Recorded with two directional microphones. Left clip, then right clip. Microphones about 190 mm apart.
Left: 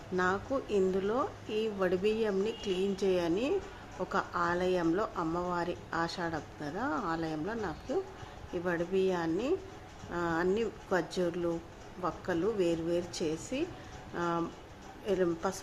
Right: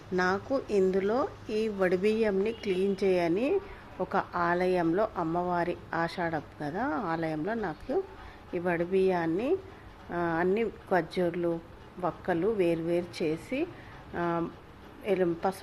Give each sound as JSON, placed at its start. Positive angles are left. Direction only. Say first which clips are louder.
{"t": 0.2, "sound": "a woman's voice", "louder": "right 3 dB", "side_deg": -25}